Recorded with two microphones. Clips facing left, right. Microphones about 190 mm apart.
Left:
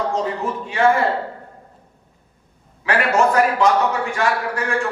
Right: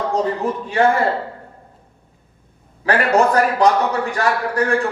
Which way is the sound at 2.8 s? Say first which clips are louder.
Right 2 dB; 35° right (ahead or behind).